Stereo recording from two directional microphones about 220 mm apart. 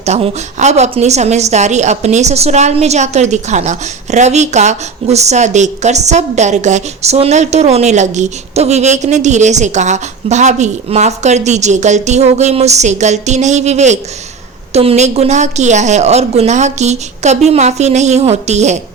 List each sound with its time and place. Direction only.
0.0 s a woman's voice: 30° right (ahead or behind)